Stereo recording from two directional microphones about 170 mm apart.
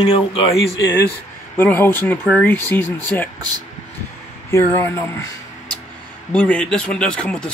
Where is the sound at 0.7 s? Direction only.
90° left.